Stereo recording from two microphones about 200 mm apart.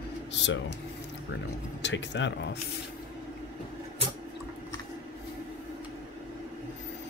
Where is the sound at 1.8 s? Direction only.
60° left (ahead or behind).